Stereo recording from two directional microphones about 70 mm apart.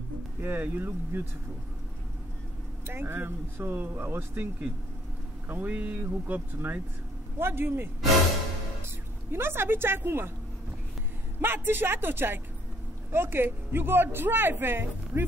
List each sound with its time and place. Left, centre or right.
0.4 s speech: right
2.9 s speech: right
5.5 s speech: right
11.4 s speech: right